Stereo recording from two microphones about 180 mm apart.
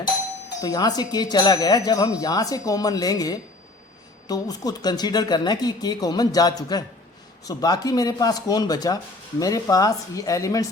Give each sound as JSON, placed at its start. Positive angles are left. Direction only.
{"t": 0.6, "sound": "speech", "side_deg": 20}